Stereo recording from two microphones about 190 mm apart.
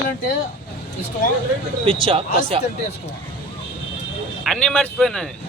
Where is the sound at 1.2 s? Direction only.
45° left (ahead or behind).